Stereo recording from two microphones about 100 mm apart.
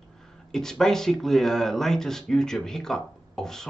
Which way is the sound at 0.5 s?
5° left (ahead or behind).